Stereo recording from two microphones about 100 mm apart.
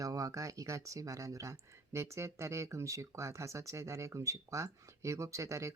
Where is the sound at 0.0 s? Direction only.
35° right (ahead or behind).